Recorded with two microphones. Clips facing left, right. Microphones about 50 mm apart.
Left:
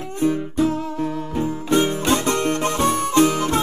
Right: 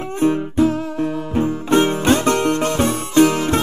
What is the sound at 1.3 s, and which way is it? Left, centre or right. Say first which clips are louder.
Music: right 4 dB; right.